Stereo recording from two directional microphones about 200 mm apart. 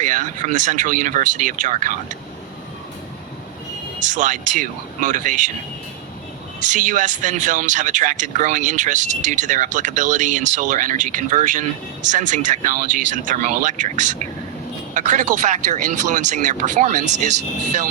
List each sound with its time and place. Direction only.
0.0 s speech: 40° right (ahead or behind)
4.0 s speech: 40° right (ahead or behind)
6.6 s speech: 40° right (ahead or behind)